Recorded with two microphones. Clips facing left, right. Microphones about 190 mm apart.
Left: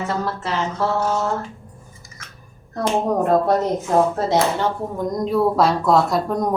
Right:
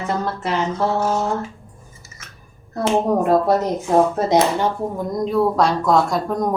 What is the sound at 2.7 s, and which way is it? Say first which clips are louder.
Speech: right 2 dB; 10° right (ahead or behind).